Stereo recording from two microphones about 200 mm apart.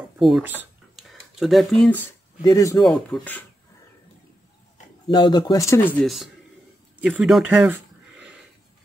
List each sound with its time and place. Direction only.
0.2 s speech: centre (ahead or behind)
0.6 s a sound: centre (ahead or behind)
2.4 s speech: 15° left (ahead or behind)
2.8 s speech: centre (ahead or behind)
5.0 s speech: 20° left (ahead or behind)
6.0 s speech: centre (ahead or behind)
7.0 s a sound: 5° right (ahead or behind)